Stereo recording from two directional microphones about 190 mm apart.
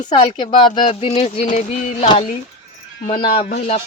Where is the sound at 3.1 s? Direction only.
50° left (ahead or behind).